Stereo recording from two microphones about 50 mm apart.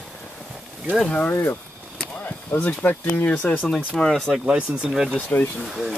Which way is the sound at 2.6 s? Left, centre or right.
Left.